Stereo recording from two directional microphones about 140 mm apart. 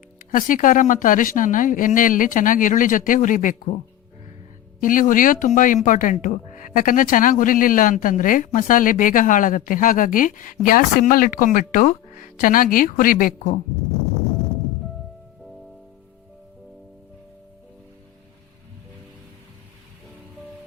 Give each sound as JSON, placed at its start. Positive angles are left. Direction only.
{"t": 0.2, "sound": "speech", "side_deg": 75}
{"t": 4.8, "sound": "speech", "side_deg": 70}
{"t": 10.7, "sound": "speech", "side_deg": 90}